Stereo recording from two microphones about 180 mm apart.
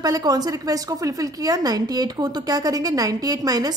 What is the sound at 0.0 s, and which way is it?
A woman's voice, 20° right (ahead or behind).